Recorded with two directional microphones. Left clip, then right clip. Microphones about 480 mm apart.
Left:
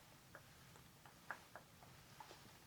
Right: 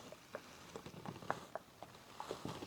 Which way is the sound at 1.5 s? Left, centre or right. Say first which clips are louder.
Right 11 dB; right.